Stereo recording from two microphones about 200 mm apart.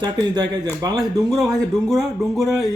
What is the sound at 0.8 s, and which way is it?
Speech, 20° right (ahead or behind).